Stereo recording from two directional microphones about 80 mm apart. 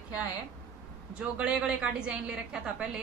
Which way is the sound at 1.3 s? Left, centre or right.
Centre.